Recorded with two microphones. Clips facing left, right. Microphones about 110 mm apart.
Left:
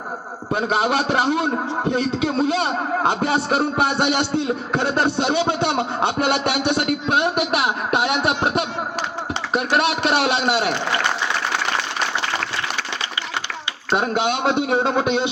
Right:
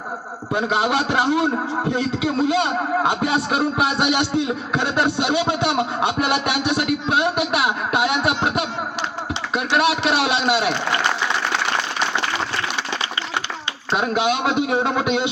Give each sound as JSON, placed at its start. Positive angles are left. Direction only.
{"t": 0.5, "sound": "speech", "side_deg": 30}
{"t": 6.7, "sound": "speech", "side_deg": 45}
{"t": 13.9, "sound": "speech", "side_deg": 30}